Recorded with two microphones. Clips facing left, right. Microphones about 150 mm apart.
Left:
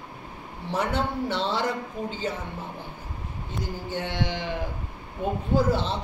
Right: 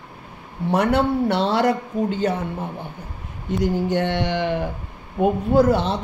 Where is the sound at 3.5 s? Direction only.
75° right (ahead or behind).